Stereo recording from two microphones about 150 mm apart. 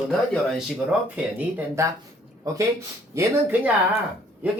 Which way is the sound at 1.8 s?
20° right (ahead or behind).